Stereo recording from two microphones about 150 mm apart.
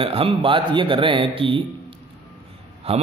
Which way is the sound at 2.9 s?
45° right (ahead or behind).